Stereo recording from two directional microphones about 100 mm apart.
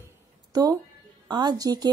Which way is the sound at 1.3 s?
45° right (ahead or behind).